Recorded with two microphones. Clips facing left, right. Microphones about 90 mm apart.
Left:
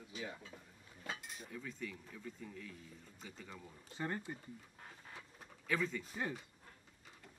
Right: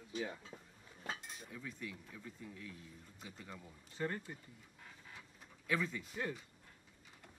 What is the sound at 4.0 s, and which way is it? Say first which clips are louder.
Speech: right 1 dB; 15° left (ahead or behind).